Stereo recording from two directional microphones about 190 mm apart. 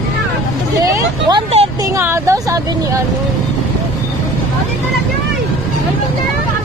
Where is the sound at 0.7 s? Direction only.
20° right (ahead or behind).